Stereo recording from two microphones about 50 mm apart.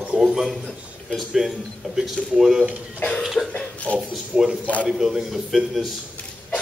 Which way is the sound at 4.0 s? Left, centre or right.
Centre.